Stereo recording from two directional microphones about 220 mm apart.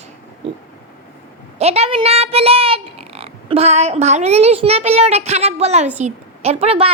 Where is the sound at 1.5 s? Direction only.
30° right (ahead or behind).